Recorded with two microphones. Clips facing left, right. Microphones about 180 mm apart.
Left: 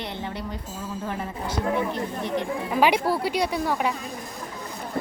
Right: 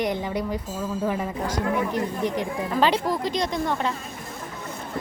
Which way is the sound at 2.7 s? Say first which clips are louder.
Left 1 dB; 10° left (ahead or behind).